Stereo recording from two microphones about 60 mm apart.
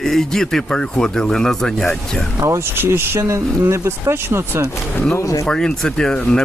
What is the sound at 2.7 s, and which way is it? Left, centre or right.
Speech, right.